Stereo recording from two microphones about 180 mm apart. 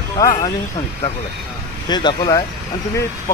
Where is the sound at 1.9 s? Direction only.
25° left (ahead or behind).